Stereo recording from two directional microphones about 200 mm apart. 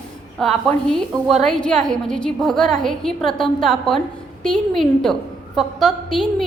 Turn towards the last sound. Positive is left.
turn(degrees=0)  # may be behind; listen again after turning